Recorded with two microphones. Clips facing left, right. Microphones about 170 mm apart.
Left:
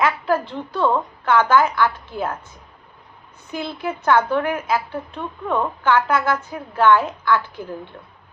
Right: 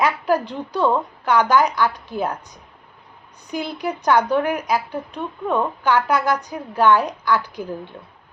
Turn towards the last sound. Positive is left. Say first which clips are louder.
# left 1 dB
turn(degrees=-15)  # may be behind; listen again after turning